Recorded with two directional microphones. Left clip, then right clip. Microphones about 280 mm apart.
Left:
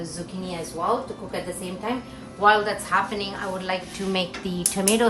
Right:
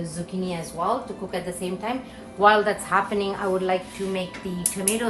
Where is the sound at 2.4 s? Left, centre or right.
Right.